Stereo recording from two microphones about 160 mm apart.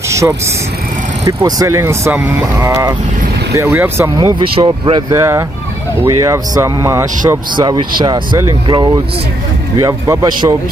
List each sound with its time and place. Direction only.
0.1 s vehicle: 20° right (ahead or behind)
1.2 s speech: 20° right (ahead or behind)
4.4 s speech: 35° right (ahead or behind)
6.0 s speech: 20° right (ahead or behind)